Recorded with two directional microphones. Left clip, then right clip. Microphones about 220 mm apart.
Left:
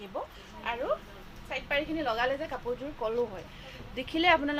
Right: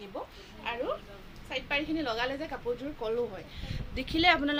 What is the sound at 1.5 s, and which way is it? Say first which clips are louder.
A woman's voice: left 1 dB; 10° right (ahead or behind).